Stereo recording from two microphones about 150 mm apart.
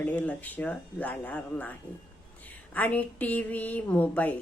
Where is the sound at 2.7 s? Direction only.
10° left (ahead or behind).